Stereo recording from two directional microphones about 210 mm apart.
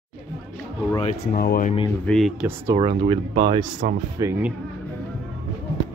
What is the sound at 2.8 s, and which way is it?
Speech, 25° right (ahead or behind).